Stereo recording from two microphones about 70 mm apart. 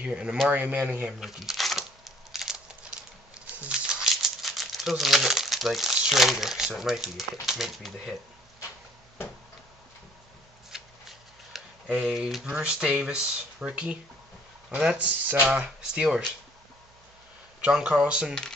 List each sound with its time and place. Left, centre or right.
0.0 s speech: centre
1.2 s a sound: centre
7.4 s speech: centre
10.7 s shuffling cards: centre
11.9 s speech: centre
12.4 s speech: centre
17.6 s speech: centre